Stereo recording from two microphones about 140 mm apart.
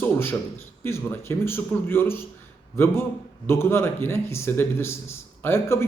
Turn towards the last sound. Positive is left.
turn(degrees=20)  # may be behind; listen again after turning